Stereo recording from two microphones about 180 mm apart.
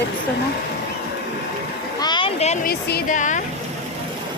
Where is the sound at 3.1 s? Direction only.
45° left (ahead or behind).